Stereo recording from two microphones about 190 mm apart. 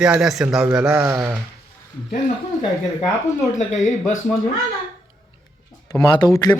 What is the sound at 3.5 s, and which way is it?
Speech, 40° left (ahead or behind).